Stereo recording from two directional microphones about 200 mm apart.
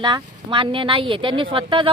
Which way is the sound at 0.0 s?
25° right (ahead or behind).